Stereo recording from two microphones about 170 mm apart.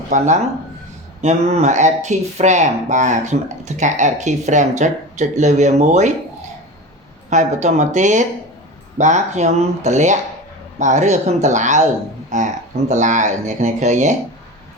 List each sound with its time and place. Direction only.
0.1 s speech: 45° right (ahead or behind)
7.3 s speech: 45° right (ahead or behind)